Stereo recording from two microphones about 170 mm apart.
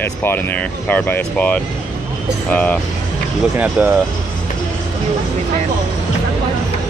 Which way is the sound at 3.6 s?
10° right (ahead or behind).